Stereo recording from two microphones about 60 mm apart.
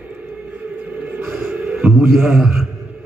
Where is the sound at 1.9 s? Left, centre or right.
Centre.